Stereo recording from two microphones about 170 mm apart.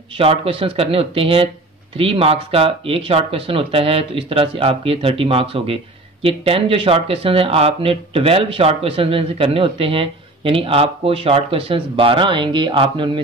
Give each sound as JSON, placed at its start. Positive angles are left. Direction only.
{"t": 0.2, "sound": "speech", "side_deg": -35}